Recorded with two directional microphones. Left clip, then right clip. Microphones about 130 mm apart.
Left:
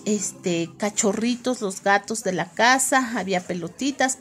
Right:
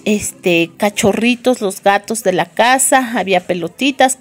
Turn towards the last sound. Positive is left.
turn(degrees=-25)  # may be behind; listen again after turning